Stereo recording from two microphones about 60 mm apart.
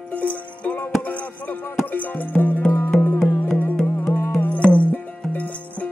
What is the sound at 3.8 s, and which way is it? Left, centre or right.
Music, left.